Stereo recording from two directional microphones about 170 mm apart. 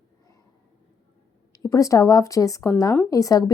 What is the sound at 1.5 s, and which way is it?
Speech, 20° left (ahead or behind).